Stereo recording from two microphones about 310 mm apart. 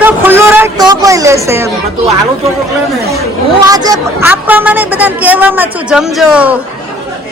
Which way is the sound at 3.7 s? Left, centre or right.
Centre.